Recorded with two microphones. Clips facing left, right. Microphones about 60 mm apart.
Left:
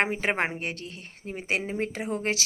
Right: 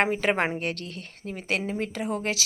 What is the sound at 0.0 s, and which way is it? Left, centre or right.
Speech, left.